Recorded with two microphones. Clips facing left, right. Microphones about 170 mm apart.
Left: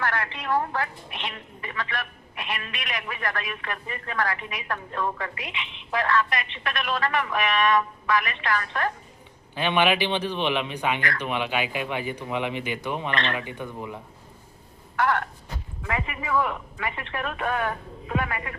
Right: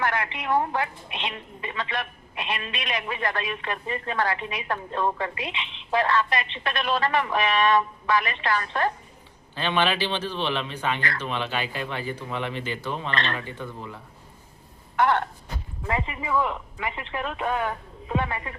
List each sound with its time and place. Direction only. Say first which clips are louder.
0.0 s a woman's voice: right 2 dB; 15° right (ahead or behind)
9.6 s speech: left 2 dB; 15° left (ahead or behind)
14.9 s a woman's voice: right 2 dB; 25° right (ahead or behind)